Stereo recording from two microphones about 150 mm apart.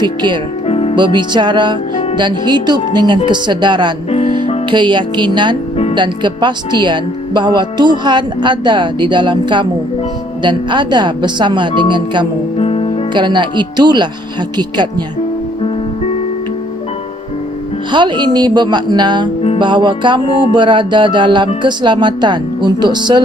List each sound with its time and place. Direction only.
0.0 s speech: 30° right (ahead or behind)
0.7 s music: 40° left (ahead or behind)
0.9 s speech: 30° right (ahead or behind)
4.1 s music: 50° left (ahead or behind)
4.7 s speech: 30° right (ahead or behind)
12.5 s music: 40° left (ahead or behind)
13.1 s speech: 30° right (ahead or behind)
17.9 s speech: 30° right (ahead or behind)